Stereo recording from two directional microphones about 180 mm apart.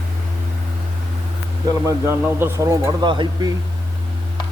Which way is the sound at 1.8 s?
15° right (ahead or behind).